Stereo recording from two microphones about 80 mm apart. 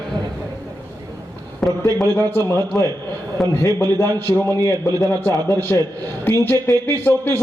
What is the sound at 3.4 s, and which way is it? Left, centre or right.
Speech, centre.